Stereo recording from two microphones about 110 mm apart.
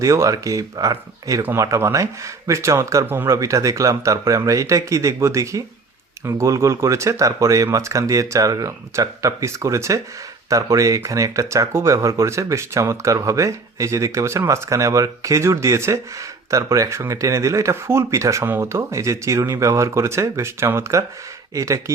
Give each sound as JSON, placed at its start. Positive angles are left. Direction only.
{"t": 0.0, "sound": "speech", "side_deg": -30}